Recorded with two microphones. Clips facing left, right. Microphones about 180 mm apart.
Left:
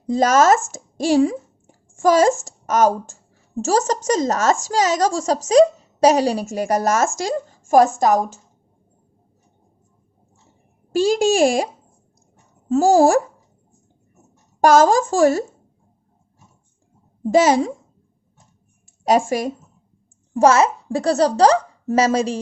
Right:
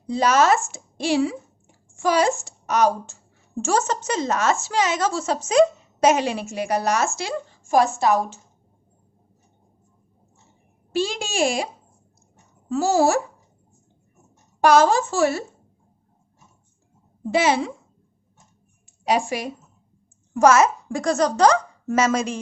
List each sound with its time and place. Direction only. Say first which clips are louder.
0.1 s a woman's voice: left 4 dB; 45° left (ahead or behind)
10.9 s a woman's voice: left 8 dB; 40° left (ahead or behind)
14.6 s a woman's voice: left 3 dB; 45° left (ahead or behind)
17.3 s a woman's voice: left 5 dB; 40° left (ahead or behind)
18.9 s speech: left 5 dB; 45° left (ahead or behind)
20.3 s speech: left 1 dB; 30° left (ahead or behind)